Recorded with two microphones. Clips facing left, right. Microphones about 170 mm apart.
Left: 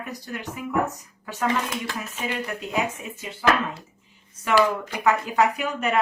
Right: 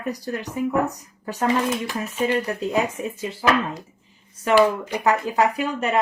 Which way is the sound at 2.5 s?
35° right (ahead or behind).